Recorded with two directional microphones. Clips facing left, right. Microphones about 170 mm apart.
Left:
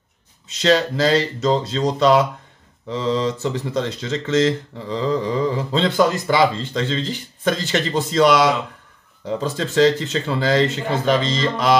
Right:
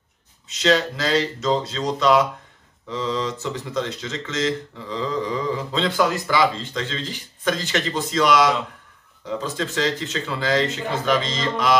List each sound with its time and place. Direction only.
0.5 s speech: 30° left (ahead or behind)